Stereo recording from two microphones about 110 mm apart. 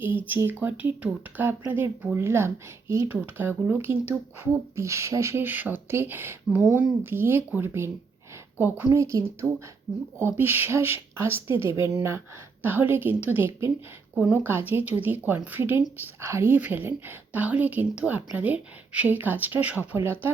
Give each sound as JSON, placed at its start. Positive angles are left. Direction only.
{"t": 0.0, "sound": "a woman's voice", "side_deg": -15}